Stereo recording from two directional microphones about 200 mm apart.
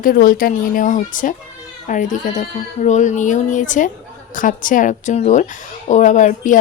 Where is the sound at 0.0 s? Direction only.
45° left (ahead or behind).